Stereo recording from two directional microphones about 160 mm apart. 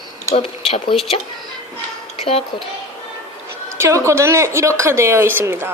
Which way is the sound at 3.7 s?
15° right (ahead or behind).